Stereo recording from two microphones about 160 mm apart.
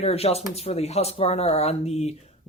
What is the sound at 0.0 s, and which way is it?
Speech, 40° left (ahead or behind).